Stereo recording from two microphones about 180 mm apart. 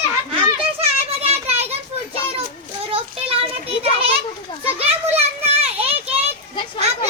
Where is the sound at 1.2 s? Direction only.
35° right (ahead or behind).